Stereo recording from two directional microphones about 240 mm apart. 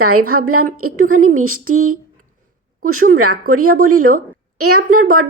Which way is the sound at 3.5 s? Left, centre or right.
Right.